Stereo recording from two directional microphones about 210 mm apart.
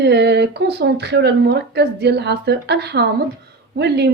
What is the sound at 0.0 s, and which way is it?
A woman's voice, 50° right (ahead or behind).